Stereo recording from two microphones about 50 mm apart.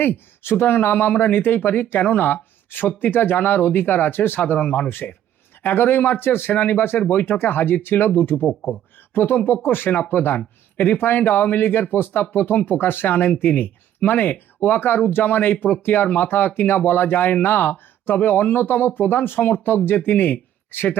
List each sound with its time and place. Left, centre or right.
0.0 s speech: left